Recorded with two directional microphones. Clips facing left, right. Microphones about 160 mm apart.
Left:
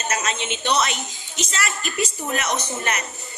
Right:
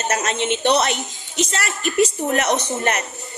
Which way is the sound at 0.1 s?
60° right (ahead or behind).